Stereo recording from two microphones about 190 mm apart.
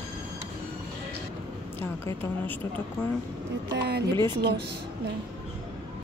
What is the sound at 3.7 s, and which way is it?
Speech, 60° right (ahead or behind).